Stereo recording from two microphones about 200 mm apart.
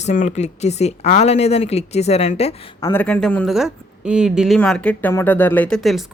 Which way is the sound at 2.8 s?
10° left (ahead or behind).